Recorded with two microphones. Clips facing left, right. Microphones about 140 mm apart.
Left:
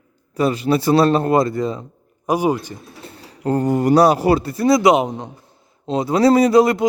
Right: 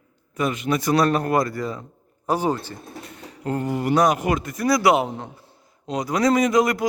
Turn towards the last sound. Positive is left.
turn(degrees=30)  # may be behind; listen again after turning